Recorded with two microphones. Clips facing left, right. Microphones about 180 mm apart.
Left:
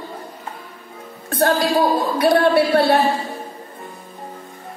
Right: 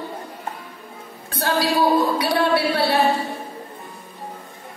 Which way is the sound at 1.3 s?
50° left (ahead or behind).